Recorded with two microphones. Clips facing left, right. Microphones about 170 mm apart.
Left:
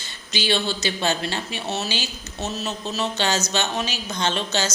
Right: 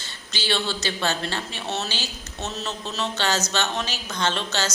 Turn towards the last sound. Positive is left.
turn(degrees=15)  # may be behind; listen again after turning